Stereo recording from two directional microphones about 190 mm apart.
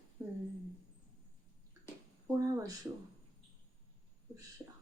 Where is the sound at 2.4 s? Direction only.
15° right (ahead or behind).